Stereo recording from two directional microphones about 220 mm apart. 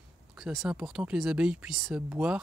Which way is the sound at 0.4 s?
Centre (ahead or behind).